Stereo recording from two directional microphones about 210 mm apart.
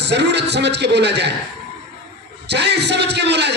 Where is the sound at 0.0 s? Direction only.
55° right (ahead or behind).